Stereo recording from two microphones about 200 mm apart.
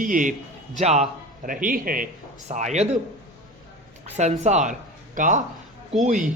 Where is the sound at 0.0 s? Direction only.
40° right (ahead or behind).